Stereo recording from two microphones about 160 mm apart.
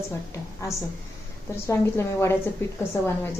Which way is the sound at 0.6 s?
20° left (ahead or behind).